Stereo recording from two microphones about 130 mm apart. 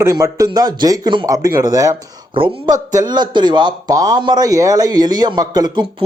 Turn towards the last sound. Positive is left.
turn(degrees=-30)  # may be behind; listen again after turning